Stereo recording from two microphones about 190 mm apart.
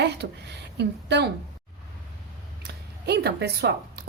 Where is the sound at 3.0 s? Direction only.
60° right (ahead or behind).